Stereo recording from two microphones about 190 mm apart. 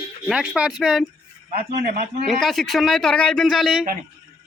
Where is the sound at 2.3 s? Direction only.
Centre (ahead or behind).